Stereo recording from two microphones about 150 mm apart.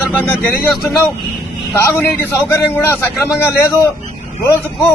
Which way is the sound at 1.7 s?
15° left (ahead or behind).